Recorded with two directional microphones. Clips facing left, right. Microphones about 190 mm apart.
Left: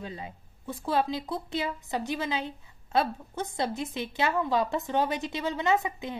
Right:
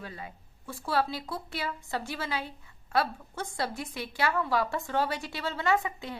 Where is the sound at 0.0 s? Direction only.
20° left (ahead or behind).